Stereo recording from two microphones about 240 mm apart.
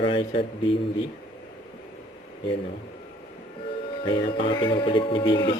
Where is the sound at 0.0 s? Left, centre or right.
Left.